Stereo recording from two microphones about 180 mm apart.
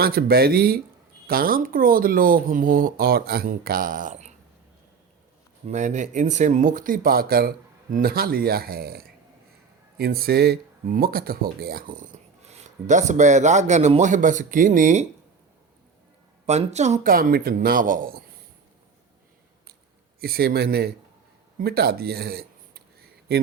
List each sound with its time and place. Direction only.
0.0 s speech: 60° right (ahead or behind)
5.6 s speech: 40° right (ahead or behind)
12.4 s speech: 40° right (ahead or behind)
16.5 s speech: 40° right (ahead or behind)
20.2 s speech: 60° right (ahead or behind)